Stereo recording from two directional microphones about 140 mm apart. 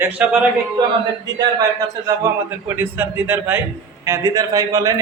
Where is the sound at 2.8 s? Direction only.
15° right (ahead or behind).